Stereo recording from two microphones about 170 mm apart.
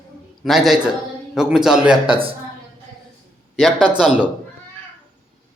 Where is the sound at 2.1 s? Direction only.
30° right (ahead or behind).